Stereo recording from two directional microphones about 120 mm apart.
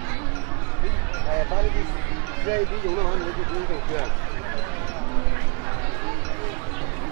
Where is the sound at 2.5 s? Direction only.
25° right (ahead or behind).